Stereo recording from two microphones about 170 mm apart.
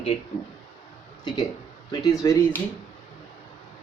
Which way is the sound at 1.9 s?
20° left (ahead or behind).